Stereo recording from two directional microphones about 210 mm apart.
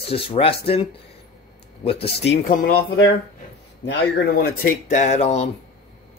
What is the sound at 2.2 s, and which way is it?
Speech, 45° left (ahead or behind).